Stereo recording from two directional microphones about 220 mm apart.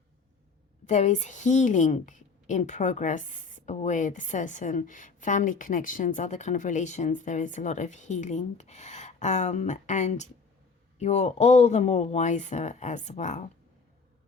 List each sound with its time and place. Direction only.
0.9 s a woman's voice: 30° left (ahead or behind)